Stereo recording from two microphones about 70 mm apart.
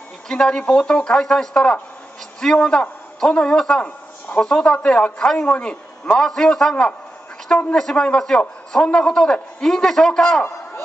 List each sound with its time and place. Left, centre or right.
0.3 s a man's voice: centre
3.8 s a sound: left
4.5 s a man's voice: centre